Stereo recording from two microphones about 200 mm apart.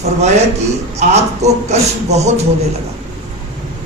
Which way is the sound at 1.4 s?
35° right (ahead or behind).